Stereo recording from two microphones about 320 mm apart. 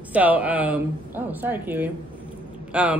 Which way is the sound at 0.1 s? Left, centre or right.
Centre.